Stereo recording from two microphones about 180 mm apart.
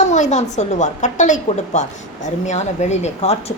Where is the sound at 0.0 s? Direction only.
40° left (ahead or behind).